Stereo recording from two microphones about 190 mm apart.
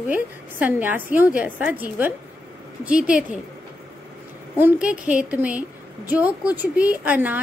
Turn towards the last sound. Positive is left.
turn(degrees=-10)  # may be behind; listen again after turning